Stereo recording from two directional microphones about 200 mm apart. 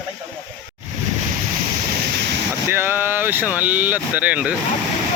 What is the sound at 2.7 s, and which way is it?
Speech, 10° right (ahead or behind).